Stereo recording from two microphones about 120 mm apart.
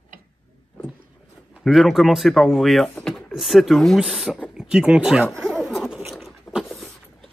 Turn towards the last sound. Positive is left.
turn(degrees=0)  # may be behind; listen again after turning